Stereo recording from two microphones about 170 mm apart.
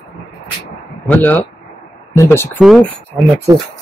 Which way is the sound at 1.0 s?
10° left (ahead or behind).